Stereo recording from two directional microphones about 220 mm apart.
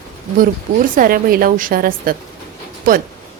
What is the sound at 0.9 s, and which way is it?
Speech, 40° right (ahead or behind).